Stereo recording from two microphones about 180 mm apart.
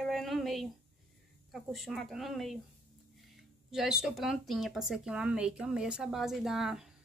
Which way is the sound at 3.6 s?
5° right (ahead or behind).